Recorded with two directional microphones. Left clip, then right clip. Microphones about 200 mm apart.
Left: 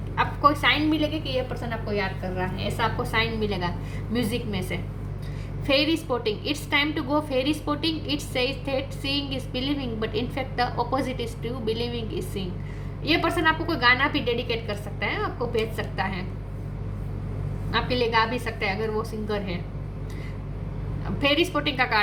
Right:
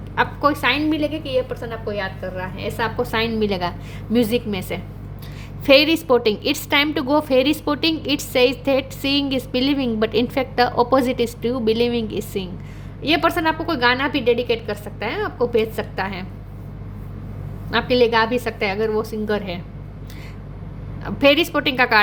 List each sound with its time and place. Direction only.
0.2 s a woman's voice: 50° right (ahead or behind)
17.7 s a woman's voice: 55° right (ahead or behind)
21.0 s a woman's voice: 55° right (ahead or behind)